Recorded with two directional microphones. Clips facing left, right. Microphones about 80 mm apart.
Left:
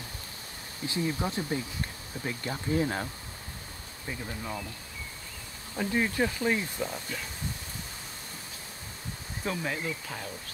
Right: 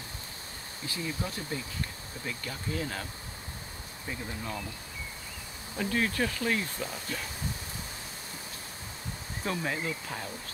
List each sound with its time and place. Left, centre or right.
0.8 s speech: left
4.1 s speech: centre
5.8 s speech: centre
9.4 s speech: centre